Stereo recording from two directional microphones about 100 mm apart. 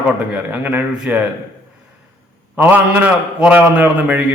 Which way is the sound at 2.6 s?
15° right (ahead or behind).